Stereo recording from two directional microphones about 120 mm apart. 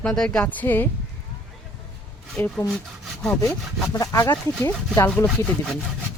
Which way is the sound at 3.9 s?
30° left (ahead or behind).